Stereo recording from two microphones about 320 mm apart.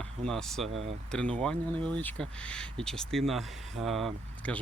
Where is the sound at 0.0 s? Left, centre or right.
Centre.